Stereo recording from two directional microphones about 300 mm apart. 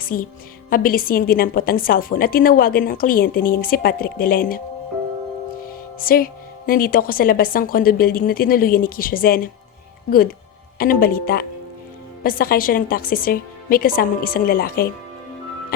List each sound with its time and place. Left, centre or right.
0.0 s a woman's voice: left
5.6 s a woman's voice: left